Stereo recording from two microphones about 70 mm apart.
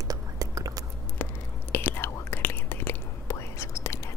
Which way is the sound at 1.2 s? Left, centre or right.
Left.